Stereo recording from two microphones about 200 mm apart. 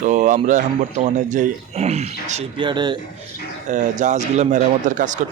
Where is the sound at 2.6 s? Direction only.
25° right (ahead or behind).